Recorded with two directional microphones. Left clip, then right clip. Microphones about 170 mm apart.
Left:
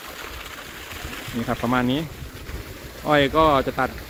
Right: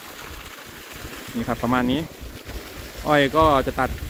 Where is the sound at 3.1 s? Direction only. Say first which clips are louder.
Even; centre (ahead or behind).